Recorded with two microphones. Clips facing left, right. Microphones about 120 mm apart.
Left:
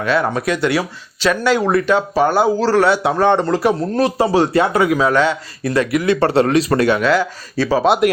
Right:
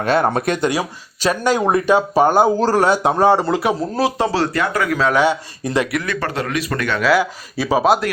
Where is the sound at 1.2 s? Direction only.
40° right (ahead or behind).